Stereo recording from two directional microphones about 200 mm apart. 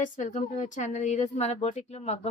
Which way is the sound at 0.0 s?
35° left (ahead or behind).